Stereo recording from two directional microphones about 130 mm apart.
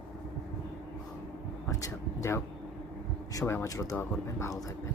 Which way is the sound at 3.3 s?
25° left (ahead or behind).